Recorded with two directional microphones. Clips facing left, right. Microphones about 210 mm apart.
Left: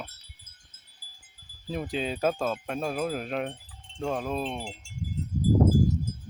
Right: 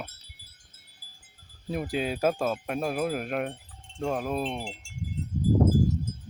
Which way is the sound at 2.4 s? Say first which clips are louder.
Right 1 dB; 15° right (ahead or behind).